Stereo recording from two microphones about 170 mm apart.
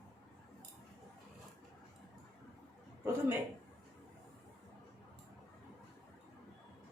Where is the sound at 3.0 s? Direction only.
15° right (ahead or behind).